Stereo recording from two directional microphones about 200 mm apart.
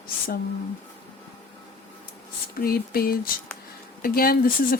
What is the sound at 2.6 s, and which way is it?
A woman's voice, 50° left (ahead or behind).